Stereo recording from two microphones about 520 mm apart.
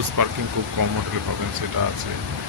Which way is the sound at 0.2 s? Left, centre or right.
Right.